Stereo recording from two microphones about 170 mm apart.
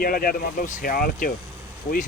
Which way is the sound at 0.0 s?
60° left (ahead or behind).